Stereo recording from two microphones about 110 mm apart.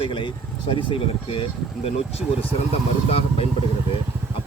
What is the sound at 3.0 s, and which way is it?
Speech, 60° left (ahead or behind).